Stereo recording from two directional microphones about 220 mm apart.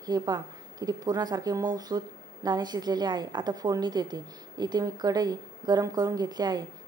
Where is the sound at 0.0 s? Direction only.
15° right (ahead or behind).